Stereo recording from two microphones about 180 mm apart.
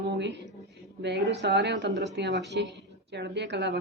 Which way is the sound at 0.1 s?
75° right (ahead or behind).